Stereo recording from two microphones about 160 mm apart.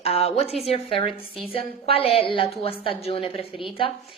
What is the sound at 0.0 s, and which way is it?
A woman's voice, 40° left (ahead or behind).